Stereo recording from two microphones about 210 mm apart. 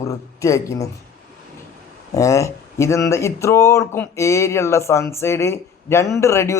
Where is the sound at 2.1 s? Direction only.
15° left (ahead or behind).